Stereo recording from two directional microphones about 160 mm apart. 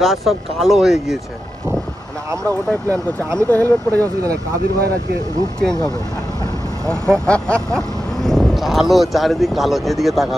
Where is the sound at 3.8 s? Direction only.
20° right (ahead or behind).